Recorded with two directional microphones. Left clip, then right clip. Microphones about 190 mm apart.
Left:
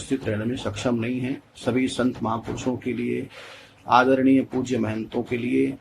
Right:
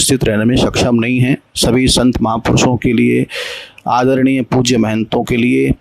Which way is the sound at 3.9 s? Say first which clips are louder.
Right 5 dB; 60° right (ahead or behind).